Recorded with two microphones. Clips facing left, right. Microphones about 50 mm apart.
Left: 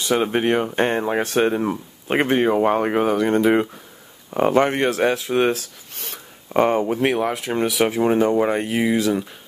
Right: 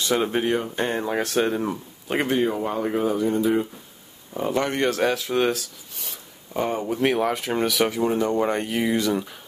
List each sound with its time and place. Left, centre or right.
0.0 s speech: centre
0.7 s speech: left; by 1.8 s centre
2.0 s speech: left
4.3 s speech: left
4.6 s speech: centre
5.9 s zipper: left
7.1 s speech: centre
7.9 s speech: left
8.3 s speech: centre